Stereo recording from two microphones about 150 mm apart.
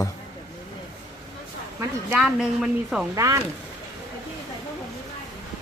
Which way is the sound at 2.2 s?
Centre (ahead or behind).